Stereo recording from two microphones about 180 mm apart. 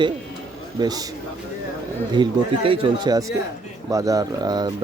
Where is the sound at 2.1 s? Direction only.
25° right (ahead or behind).